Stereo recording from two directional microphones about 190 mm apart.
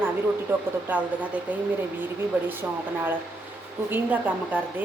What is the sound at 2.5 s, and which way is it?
A woman's voice, 10° right (ahead or behind).